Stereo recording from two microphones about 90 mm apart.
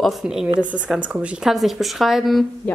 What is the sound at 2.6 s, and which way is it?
Speech, 20° left (ahead or behind).